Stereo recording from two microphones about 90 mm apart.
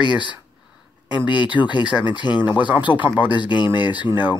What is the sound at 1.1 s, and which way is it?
Speech, 60° left (ahead or behind).